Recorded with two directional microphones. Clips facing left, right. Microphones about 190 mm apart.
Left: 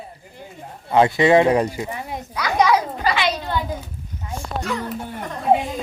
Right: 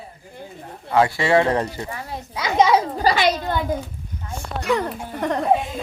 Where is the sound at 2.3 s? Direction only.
25° right (ahead or behind).